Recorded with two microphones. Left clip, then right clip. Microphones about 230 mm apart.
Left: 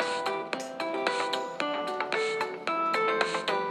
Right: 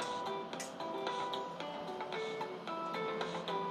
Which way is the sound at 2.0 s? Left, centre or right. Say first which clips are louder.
Left 10 dB; left.